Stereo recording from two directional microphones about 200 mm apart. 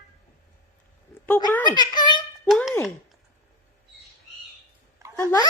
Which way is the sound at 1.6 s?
20° left (ahead or behind).